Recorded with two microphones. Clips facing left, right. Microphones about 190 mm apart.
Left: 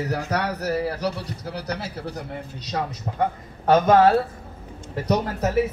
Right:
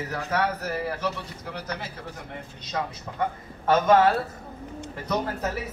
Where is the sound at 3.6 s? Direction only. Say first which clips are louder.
Left 3 dB; 40° left (ahead or behind).